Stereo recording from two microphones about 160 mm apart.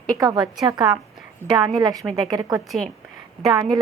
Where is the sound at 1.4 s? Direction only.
15° left (ahead or behind).